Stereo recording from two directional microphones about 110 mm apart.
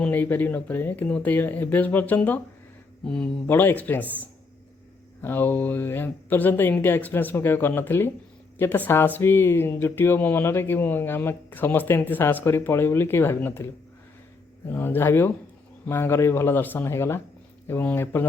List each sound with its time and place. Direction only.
0.1 s speech: 15° left (ahead or behind)
3.5 s speech: 20° left (ahead or behind)
5.2 s speech: 20° left (ahead or behind)
14.7 s speech: 20° left (ahead or behind)